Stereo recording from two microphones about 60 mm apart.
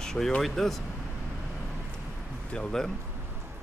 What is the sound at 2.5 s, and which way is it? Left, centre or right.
Speech, centre.